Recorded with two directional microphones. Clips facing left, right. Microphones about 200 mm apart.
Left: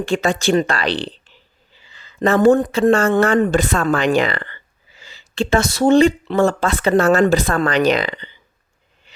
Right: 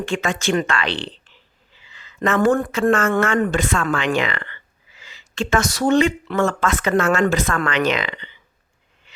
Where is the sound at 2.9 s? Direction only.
35° left (ahead or behind).